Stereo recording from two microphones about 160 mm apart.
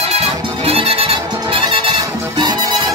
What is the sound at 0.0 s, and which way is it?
Music, 40° right (ahead or behind).